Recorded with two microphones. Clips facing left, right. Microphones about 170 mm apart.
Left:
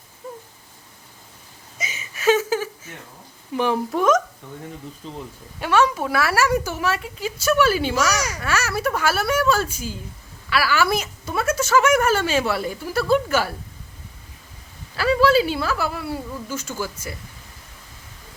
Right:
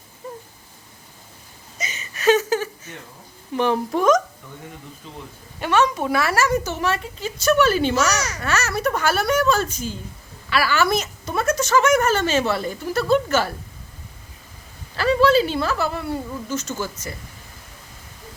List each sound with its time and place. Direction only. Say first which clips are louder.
1.8 s a sound: right 1 dB; 5° left (ahead or behind)
3.5 s speech: right 1 dB; 5° left (ahead or behind)
5.0 s speech: left 5 dB; 35° left (ahead or behind)
5.5 s a woman's voice: even; 5° left (ahead or behind)
14.9 s a woman's voice: right 1 dB; 5° left (ahead or behind)